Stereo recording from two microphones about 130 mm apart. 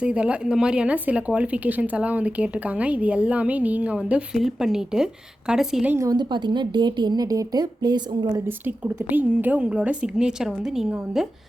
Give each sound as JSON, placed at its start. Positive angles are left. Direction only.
{"t": 0.0, "sound": "a woman's voice", "side_deg": -10}
{"t": 5.9, "sound": "a woman's voice", "side_deg": -25}
{"t": 8.4, "sound": "speech", "side_deg": -15}